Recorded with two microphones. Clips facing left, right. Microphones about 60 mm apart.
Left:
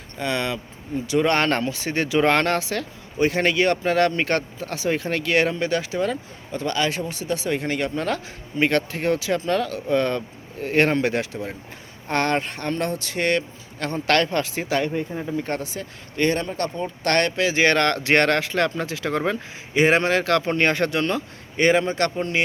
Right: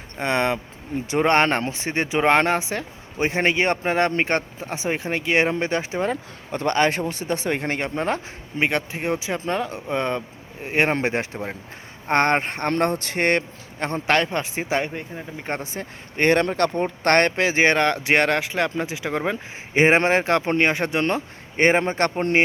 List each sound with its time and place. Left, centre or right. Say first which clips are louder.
0.2 s a man's voice: right 3 dB; right
6.5 s a man's voice: right 4 dB; right; by 10.9 s centre
11.0 s a man's voice: left 1 dB; right
14.1 s speech: left 1 dB; centre
15.1 s speech: left 5 dB; centre
15.4 s a man's voice: left 1 dB; right
16.4 s speech: right 5 dB; right
17.0 s a man's voice: right 2 dB; right
17.6 s speech: even; centre
19.7 s speech: right 1 dB; right
21.0 s a man's voice: right 1 dB; right